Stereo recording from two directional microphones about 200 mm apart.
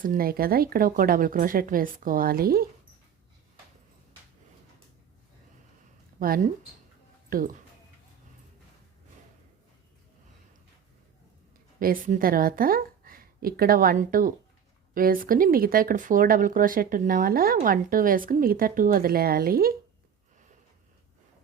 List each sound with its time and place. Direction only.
0.0 s speech: 45° right (ahead or behind)
6.1 s speech: 45° right (ahead or behind)
11.8 s a woman's voice: 45° right (ahead or behind)